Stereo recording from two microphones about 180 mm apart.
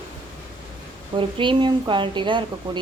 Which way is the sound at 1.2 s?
30° right (ahead or behind).